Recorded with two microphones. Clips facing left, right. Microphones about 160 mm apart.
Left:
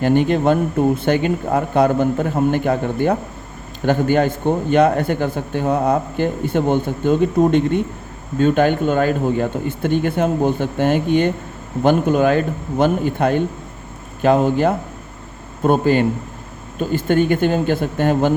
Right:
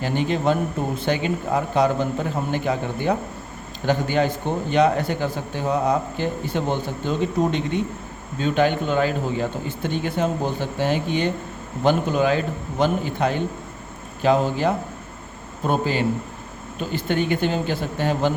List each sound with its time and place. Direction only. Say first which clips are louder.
0.0 s a man's voice: left 7 dB; 55° left (ahead or behind)